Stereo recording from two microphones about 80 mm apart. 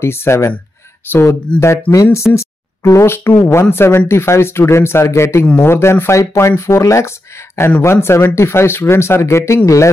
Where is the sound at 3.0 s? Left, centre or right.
Left.